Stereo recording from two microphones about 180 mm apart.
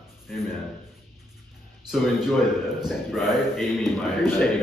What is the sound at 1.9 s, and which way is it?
A man's voice, centre (ahead or behind).